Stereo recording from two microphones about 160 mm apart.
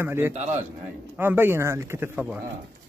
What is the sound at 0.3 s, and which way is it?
Speech, 45° right (ahead or behind).